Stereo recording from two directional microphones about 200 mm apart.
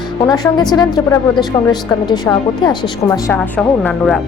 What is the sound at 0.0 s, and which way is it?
A woman's voice, 20° left (ahead or behind).